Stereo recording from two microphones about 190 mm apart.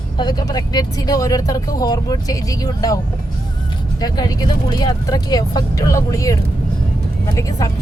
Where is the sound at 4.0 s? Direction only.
20° left (ahead or behind).